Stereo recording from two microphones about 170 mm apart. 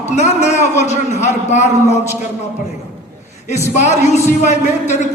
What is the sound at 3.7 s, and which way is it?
A man's voice, 40° left (ahead or behind).